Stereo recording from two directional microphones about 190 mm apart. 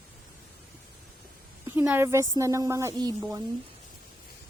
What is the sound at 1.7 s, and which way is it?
A woman's voice, 10° right (ahead or behind).